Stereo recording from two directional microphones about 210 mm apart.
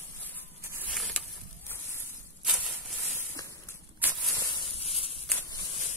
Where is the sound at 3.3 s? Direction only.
15° left (ahead or behind).